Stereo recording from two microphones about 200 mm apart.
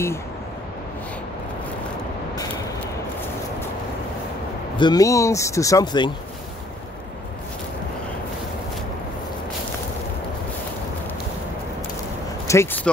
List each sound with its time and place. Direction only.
4.7 s speech: 20° left (ahead or behind)
12.4 s speech: 10° left (ahead or behind)